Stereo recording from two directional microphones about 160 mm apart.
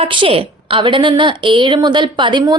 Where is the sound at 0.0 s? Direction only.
35° right (ahead or behind).